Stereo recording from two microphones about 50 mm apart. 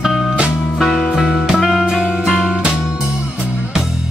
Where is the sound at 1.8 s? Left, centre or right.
Centre.